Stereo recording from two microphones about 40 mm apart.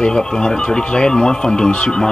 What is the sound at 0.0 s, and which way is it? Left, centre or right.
Speech, centre.